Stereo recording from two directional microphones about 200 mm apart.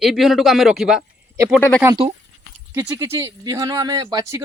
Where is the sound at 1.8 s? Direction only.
20° right (ahead or behind).